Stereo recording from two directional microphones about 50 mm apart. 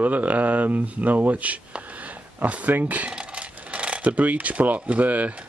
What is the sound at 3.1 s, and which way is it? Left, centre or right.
Coin, right.